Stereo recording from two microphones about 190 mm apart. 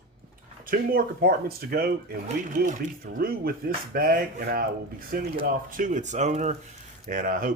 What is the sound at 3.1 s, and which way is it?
Speech, 50° right (ahead or behind).